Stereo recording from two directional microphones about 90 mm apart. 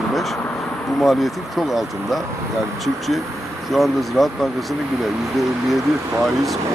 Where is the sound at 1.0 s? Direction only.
Centre (ahead or behind).